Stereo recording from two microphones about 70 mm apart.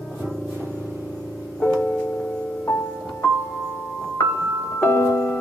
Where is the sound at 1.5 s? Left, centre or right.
Left.